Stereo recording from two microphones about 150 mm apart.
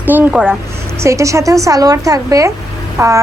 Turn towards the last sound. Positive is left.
turn(degrees=-20)  # may be behind; listen again after turning